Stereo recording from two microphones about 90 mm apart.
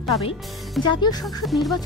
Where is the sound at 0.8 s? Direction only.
55° left (ahead or behind).